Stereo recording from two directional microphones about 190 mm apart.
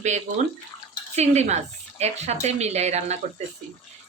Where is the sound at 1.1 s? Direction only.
35° right (ahead or behind).